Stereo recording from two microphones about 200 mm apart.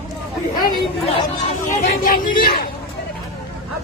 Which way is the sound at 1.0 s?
30° left (ahead or behind).